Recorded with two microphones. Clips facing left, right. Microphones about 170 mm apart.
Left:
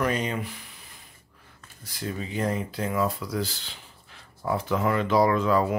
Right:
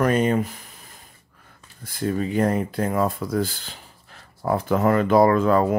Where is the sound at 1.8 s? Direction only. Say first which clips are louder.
Right 9 dB; 55° right (ahead or behind).